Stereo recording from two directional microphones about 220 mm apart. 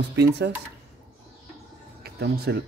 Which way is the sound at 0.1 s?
50° right (ahead or behind).